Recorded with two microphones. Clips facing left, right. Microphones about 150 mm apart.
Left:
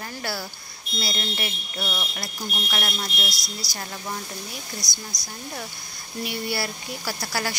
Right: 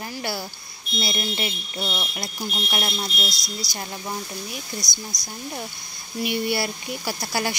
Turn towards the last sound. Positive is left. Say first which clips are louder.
# right 2 dB
turn(degrees=-20)  # may be behind; listen again after turning